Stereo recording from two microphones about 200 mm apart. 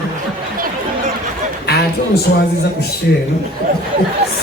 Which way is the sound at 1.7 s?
50° left (ahead or behind).